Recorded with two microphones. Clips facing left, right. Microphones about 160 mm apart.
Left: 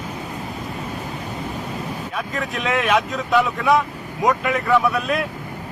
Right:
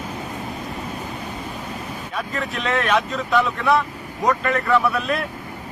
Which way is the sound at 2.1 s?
Centre (ahead or behind).